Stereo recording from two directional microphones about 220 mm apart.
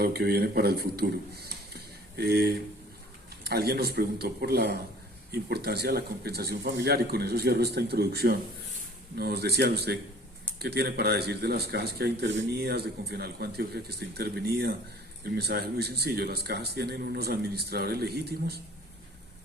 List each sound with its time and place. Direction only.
0.0 s a man's voice: 45° right (ahead or behind)